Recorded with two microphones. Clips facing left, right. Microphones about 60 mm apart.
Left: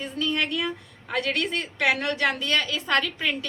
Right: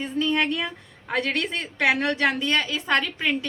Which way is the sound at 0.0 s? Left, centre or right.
Right.